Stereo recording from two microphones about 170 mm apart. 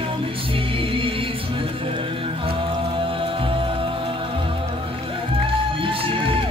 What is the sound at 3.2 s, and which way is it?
Music, 30° right (ahead or behind).